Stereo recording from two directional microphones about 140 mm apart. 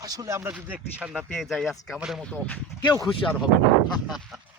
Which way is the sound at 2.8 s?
30° left (ahead or behind).